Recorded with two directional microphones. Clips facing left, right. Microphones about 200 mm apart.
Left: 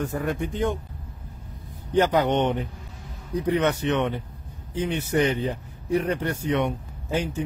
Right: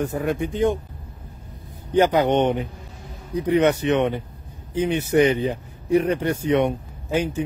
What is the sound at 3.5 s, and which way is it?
A man's voice, 15° right (ahead or behind).